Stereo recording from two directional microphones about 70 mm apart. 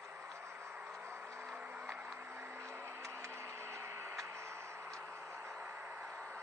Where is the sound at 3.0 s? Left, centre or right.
Right.